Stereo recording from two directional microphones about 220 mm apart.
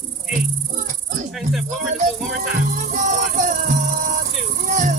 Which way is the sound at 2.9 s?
35° right (ahead or behind).